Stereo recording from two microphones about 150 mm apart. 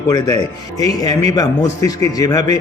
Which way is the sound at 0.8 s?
25° left (ahead or behind).